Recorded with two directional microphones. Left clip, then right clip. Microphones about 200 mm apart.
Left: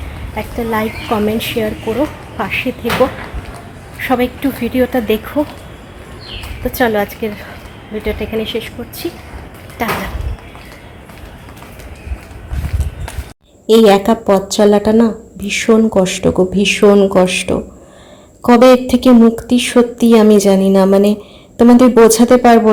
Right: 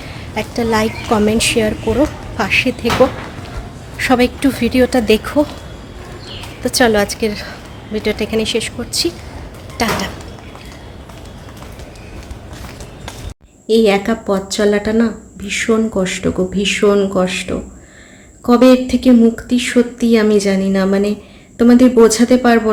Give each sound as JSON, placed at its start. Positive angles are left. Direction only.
{"t": 0.3, "sound": "a woman's voice", "side_deg": -5}
{"t": 3.9, "sound": "a woman's voice", "side_deg": -10}
{"t": 6.7, "sound": "a woman's voice", "side_deg": -5}
{"t": 13.7, "sound": "a woman's voice", "side_deg": 25}